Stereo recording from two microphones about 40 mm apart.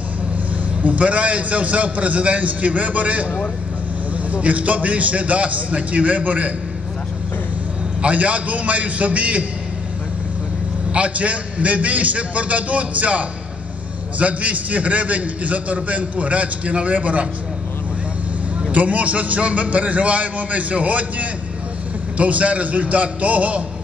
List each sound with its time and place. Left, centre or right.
0.8 s a man's voice: right
4.3 s a man's voice: right
8.0 s a man's voice: right
10.9 s a man's voice: right
18.7 s a man's voice: right